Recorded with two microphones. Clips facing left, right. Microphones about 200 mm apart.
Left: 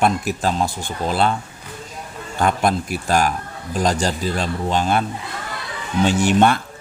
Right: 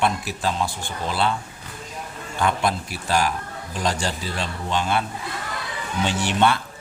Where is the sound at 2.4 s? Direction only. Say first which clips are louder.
Left 4 dB; 45° left (ahead or behind).